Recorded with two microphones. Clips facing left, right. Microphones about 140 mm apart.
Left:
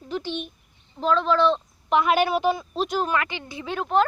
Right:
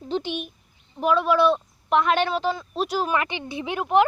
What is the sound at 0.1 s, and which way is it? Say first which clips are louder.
Speech: right 2 dB; 20° right (ahead or behind).